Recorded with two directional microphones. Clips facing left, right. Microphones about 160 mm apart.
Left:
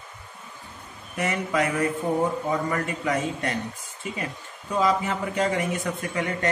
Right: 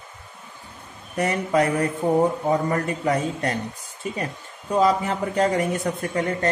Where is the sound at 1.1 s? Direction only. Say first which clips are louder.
Right 4 dB; 40° right (ahead or behind).